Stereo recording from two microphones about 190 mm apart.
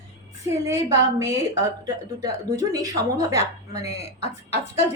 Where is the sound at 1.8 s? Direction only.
20° right (ahead or behind).